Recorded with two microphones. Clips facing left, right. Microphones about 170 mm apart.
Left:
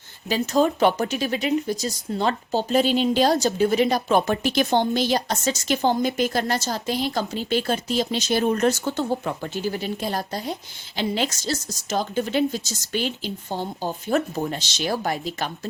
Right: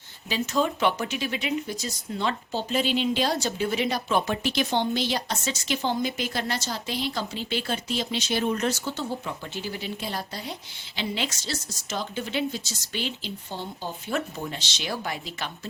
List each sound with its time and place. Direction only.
0.3 s speech: 45° left (ahead or behind)